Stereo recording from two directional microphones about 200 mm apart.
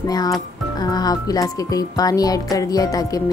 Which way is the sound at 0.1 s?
20° left (ahead or behind).